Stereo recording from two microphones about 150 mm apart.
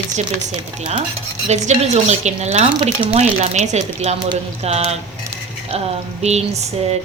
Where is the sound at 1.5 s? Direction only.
50° right (ahead or behind).